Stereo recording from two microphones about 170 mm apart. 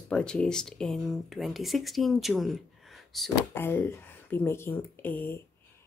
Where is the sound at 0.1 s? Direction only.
5° left (ahead or behind).